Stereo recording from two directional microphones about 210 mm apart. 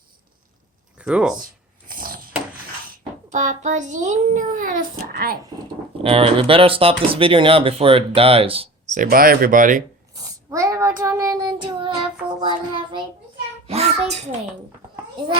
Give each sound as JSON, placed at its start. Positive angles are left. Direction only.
{"t": 0.9, "sound": "speech", "side_deg": -5}
{"t": 1.9, "sound": "chopping", "side_deg": -40}
{"t": 3.0, "sound": "a child's voice", "side_deg": -35}
{"t": 6.0, "sound": "speech", "side_deg": -25}
{"t": 9.0, "sound": "speech", "side_deg": -45}
{"t": 10.2, "sound": "child singing", "side_deg": -15}
{"t": 12.4, "sound": "speech", "side_deg": -20}
{"t": 13.7, "sound": "a sound", "side_deg": -30}